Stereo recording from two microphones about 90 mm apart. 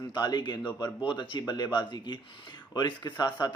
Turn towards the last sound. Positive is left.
turn(degrees=50)  # may be behind; listen again after turning